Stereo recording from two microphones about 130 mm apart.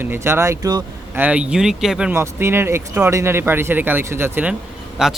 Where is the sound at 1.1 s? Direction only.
10° right (ahead or behind).